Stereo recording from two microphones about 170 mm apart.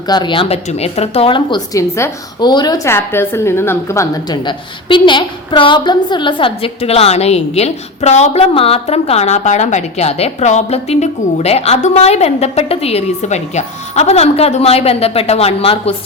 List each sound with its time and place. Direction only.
0.1 s a woman's voice: 25° left (ahead or behind)